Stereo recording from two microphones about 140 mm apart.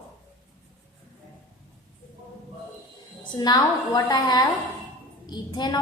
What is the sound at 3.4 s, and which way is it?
A woman's voice, 30° left (ahead or behind).